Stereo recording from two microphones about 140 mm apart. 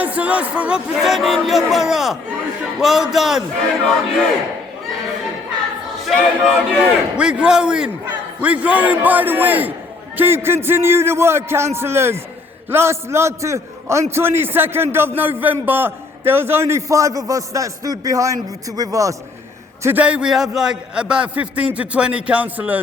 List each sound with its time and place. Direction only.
0.0 s speech: 10° right (ahead or behind)
6.1 s a man's voice: centre (ahead or behind); by 19.1 s 25° right (ahead or behind)
19.8 s a man's voice: 10° right (ahead or behind)